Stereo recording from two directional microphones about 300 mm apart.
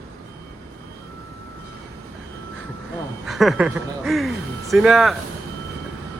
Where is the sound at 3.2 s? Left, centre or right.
Centre.